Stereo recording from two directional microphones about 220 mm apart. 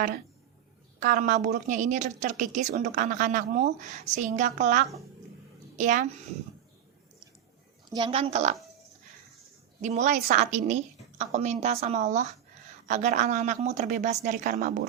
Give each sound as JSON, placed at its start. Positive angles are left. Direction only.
{"t": 0.9, "sound": "a woman's voice", "side_deg": -35}
{"t": 7.9, "sound": "a woman's voice", "side_deg": -25}
{"t": 9.8, "sound": "a woman's voice", "side_deg": -30}